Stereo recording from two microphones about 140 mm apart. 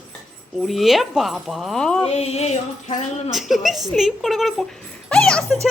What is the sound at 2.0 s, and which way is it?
Music, 45° left (ahead or behind).